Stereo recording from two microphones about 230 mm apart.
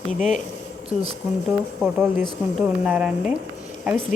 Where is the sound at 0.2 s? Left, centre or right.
Left.